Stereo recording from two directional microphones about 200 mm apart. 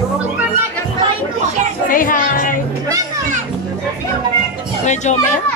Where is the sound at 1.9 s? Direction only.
45° left (ahead or behind).